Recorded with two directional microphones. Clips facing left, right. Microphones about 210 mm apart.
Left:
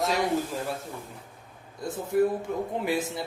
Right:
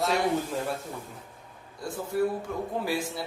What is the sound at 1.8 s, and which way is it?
A man's voice, 20° left (ahead or behind).